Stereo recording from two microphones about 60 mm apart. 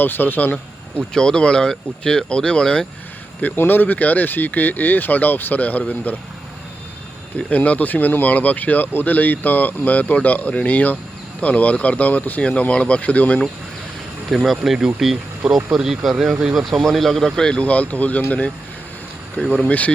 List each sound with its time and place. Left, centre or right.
0.0 s speech: left
0.9 s speech: centre
3.4 s speech: left
7.3 s speech: left
14.3 s speech: centre
17.6 s speech: left
19.6 s speech: left